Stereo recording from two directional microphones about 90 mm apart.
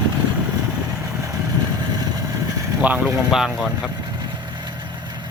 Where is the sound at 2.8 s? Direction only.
15° right (ahead or behind).